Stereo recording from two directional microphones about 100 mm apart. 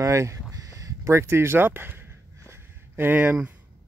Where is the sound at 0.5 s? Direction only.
35° right (ahead or behind); by 3.3 s 20° right (ahead or behind).